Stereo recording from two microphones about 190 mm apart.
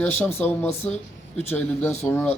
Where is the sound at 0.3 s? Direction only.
10° left (ahead or behind).